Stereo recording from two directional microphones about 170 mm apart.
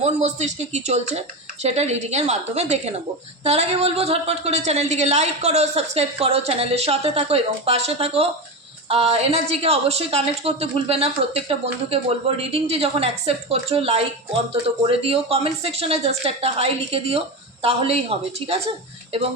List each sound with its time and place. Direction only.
0.0 s a woman's voice: 40° right (ahead or behind)